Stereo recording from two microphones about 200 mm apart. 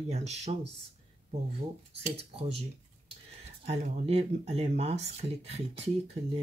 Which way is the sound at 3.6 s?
30° right (ahead or behind).